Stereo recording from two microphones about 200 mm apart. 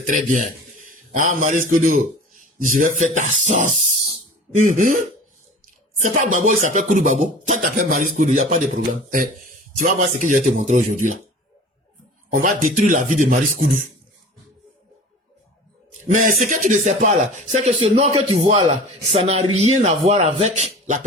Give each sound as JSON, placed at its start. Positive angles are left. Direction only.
{"t": 0.0, "sound": "a man's voice", "side_deg": -40}
{"t": 6.0, "sound": "speech", "side_deg": -40}
{"t": 12.3, "sound": "speech", "side_deg": -40}
{"t": 16.0, "sound": "speech", "side_deg": -40}